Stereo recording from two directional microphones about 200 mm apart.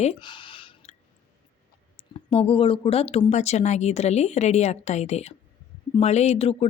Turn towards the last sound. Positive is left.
turn(degrees=30)  # may be behind; listen again after turning